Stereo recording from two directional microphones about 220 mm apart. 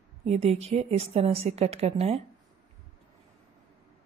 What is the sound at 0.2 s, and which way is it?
A woman's voice, 30° right (ahead or behind).